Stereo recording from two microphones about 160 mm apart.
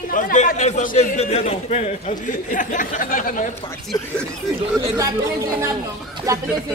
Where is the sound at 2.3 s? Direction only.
55° left (ahead or behind).